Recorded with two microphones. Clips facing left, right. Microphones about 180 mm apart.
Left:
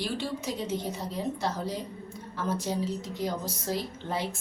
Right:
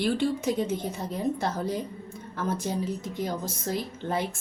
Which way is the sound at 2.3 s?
50° right (ahead or behind).